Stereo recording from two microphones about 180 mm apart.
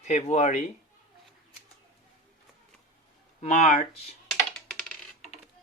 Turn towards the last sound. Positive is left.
turn(degrees=5)  # may be behind; listen again after turning